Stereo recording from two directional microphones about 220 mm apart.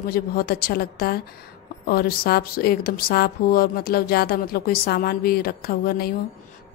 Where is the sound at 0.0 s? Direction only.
45° left (ahead or behind).